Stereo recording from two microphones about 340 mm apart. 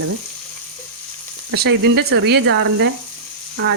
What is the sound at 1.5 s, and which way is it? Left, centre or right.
Speech, right.